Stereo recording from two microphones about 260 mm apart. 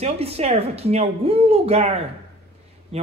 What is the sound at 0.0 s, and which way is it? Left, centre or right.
Speech, right.